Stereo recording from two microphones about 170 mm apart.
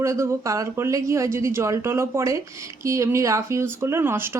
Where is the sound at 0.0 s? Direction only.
15° right (ahead or behind).